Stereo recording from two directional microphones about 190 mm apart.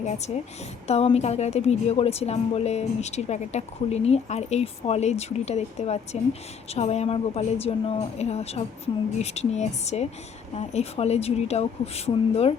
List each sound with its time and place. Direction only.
0.3 s a woman's voice: 35° left (ahead or behind)